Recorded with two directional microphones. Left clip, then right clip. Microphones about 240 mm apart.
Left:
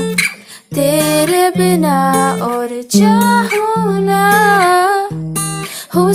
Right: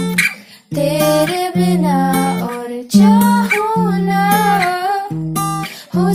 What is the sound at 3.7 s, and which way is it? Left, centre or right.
Music, left.